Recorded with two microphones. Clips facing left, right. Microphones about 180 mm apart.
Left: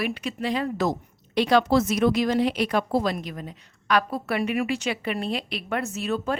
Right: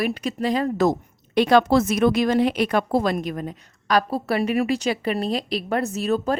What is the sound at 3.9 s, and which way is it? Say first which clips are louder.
A woman's voice: right 3 dB; 35° right (ahead or behind).